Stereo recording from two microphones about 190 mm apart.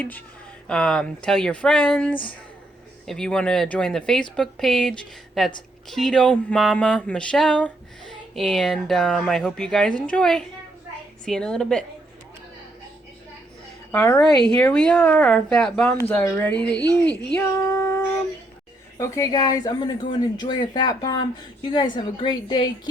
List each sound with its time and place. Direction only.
0.7 s speech: 5° left (ahead or behind)
13.9 s speech: 10° left (ahead or behind)